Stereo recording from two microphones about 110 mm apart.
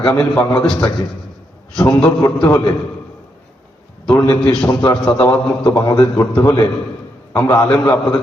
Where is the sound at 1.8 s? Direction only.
25° left (ahead or behind).